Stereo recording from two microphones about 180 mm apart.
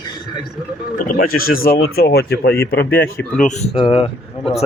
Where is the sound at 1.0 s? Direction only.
55° left (ahead or behind).